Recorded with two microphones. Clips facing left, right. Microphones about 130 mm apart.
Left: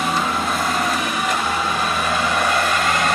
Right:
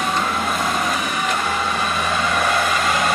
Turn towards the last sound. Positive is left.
turn(degrees=0)  # may be behind; listen again after turning